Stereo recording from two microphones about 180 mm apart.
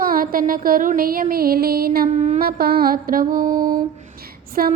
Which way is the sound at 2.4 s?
55° right (ahead or behind).